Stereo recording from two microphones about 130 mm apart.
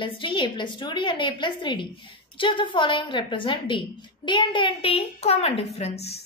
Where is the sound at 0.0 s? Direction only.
40° left (ahead or behind).